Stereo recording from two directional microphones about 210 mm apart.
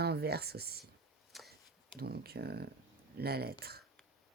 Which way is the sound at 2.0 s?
50° right (ahead or behind).